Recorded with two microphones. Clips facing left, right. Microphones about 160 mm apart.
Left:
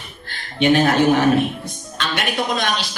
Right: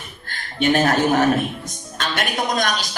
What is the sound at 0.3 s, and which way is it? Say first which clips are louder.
Speech: left 3 dB; 45° right (ahead or behind).